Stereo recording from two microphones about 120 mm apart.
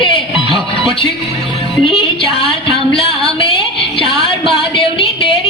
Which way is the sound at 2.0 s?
50° left (ahead or behind).